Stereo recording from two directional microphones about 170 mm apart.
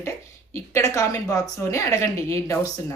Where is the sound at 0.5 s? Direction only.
15° left (ahead or behind).